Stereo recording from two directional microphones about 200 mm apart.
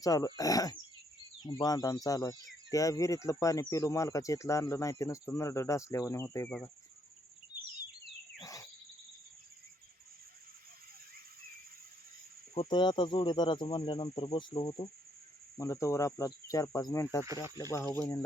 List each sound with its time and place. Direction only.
0.0 s speech: 20° left (ahead or behind)
8.4 s cricket: 15° left (ahead or behind)
12.5 s speech: 20° left (ahead or behind)
15.5 s speech: 15° left (ahead or behind)